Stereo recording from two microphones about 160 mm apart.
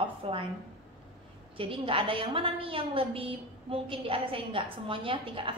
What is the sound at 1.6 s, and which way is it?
A woman's voice, 35° right (ahead or behind).